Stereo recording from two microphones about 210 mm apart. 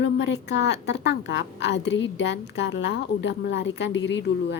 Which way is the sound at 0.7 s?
55° left (ahead or behind).